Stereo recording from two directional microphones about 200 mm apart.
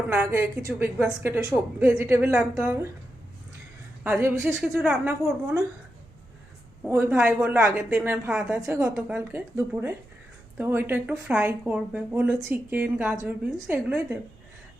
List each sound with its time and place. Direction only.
0.1 s speech: 10° right (ahead or behind)
4.0 s speech: 10° right (ahead or behind)
6.8 s speech: 10° right (ahead or behind)